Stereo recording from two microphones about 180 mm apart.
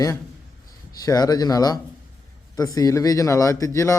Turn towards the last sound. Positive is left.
turn(degrees=15)  # may be behind; listen again after turning